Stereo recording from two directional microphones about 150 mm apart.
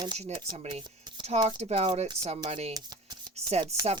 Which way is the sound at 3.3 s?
40° right (ahead or behind).